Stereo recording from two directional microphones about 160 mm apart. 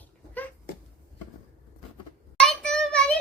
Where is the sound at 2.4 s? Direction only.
5° left (ahead or behind).